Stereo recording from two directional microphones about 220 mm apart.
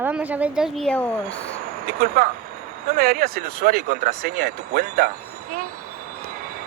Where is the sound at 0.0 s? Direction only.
5° right (ahead or behind).